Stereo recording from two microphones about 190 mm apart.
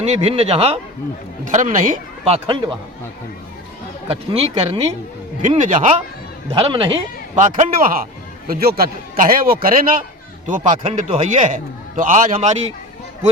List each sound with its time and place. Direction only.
0.0 s a man's voice: 35° right (ahead or behind)
4.1 s a man's voice: 30° right (ahead or behind)
5.4 s a man's voice: 40° right (ahead or behind)
6.5 s speech: 25° right (ahead or behind)
7.4 s a man's voice: 40° right (ahead or behind)